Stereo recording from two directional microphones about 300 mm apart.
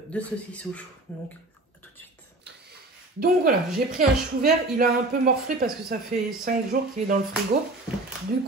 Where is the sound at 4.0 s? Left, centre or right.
Right.